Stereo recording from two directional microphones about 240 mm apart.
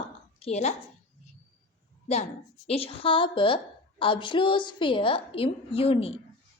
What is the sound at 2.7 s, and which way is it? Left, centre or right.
A woman's voice, left.